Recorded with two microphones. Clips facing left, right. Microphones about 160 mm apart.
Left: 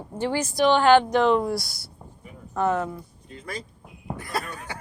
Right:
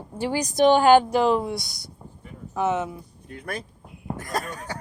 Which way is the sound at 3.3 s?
60° right (ahead or behind).